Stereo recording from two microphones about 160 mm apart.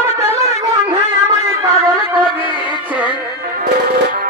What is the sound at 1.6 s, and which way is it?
Music, 20° right (ahead or behind).